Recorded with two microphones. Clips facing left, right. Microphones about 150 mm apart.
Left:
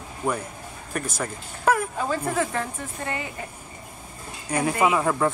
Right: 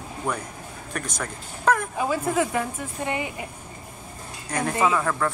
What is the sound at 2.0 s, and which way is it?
A woman's voice, 10° right (ahead or behind).